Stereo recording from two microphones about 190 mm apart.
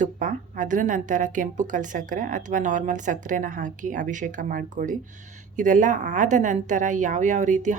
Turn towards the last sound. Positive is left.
turn(degrees=-40)  # may be behind; listen again after turning